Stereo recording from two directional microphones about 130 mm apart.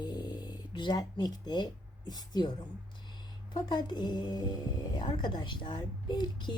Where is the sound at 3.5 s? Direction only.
35° left (ahead or behind).